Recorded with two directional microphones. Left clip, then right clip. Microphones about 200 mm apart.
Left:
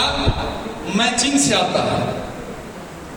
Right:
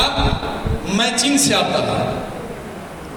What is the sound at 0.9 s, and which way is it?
Speech, 30° right (ahead or behind).